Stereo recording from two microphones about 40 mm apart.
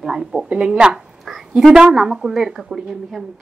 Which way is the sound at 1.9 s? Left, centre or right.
Centre.